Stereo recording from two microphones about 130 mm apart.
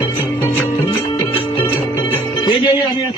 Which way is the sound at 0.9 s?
45° left (ahead or behind).